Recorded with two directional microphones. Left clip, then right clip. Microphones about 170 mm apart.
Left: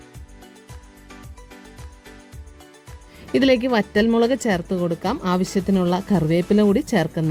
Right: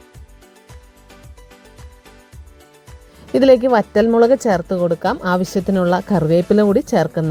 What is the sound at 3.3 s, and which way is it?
Speech, centre (ahead or behind).